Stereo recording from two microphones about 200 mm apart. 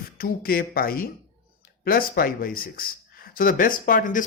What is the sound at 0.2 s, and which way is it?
Speech, 45° left (ahead or behind).